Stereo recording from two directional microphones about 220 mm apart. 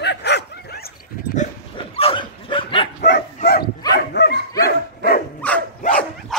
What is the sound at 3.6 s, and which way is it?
Dog, 20° left (ahead or behind).